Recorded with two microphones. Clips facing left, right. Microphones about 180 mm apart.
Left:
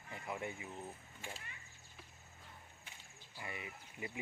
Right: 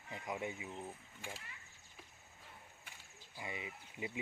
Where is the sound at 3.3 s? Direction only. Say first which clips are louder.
Right 2 dB; 20° right (ahead or behind).